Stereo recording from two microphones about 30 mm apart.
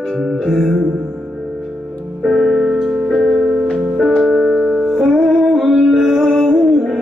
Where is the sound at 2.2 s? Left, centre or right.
Centre.